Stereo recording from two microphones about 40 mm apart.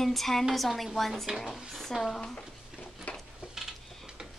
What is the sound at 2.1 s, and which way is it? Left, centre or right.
Speech, left.